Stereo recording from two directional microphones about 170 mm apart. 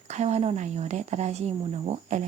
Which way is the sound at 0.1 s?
40° right (ahead or behind).